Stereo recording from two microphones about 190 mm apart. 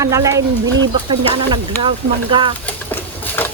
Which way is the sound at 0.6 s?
80° right.